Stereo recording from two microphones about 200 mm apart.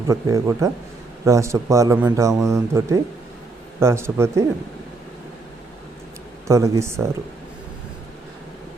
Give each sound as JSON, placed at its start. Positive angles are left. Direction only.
{"t": 0.1, "sound": "speech", "side_deg": -15}
{"t": 6.5, "sound": "speech", "side_deg": -15}